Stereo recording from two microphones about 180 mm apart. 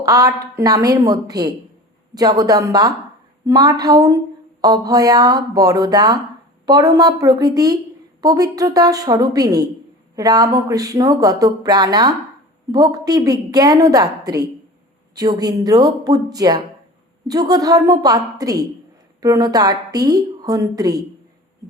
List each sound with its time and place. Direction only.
0.0 s a woman's voice: 20° right (ahead or behind)